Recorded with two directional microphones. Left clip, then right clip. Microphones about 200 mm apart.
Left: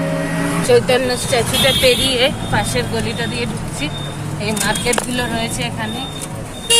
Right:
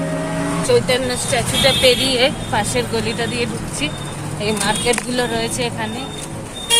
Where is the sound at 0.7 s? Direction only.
15° left (ahead or behind).